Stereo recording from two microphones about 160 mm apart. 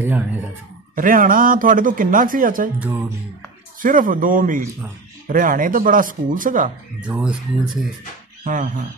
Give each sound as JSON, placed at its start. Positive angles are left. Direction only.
{"t": 0.0, "sound": "speech", "side_deg": -10}
{"t": 0.9, "sound": "speech", "side_deg": -60}
{"t": 2.8, "sound": "speech", "side_deg": -15}
{"t": 3.8, "sound": "speech", "side_deg": -55}
{"t": 7.0, "sound": "speech", "side_deg": -10}
{"t": 8.5, "sound": "speech", "side_deg": -55}